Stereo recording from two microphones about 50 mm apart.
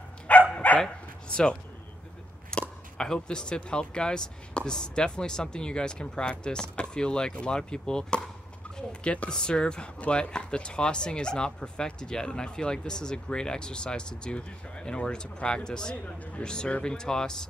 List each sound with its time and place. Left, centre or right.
0.3 s dog: left
0.7 s bow-wow: centre
2.5 s a sound: centre
3.0 s speech: centre